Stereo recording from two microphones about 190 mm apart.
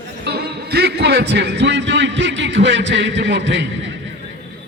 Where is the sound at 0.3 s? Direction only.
55° right (ahead or behind); by 3.9 s 70° right (ahead or behind).